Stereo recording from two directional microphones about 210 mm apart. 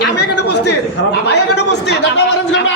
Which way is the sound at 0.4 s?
55° left (ahead or behind).